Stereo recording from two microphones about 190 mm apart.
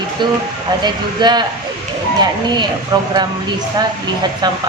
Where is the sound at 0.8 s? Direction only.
25° right (ahead or behind).